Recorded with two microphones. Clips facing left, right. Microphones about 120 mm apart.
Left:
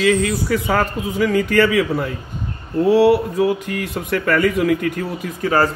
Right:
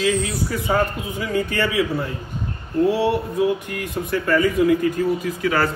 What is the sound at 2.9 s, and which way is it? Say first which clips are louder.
Speech: left 7 dB; 90° left.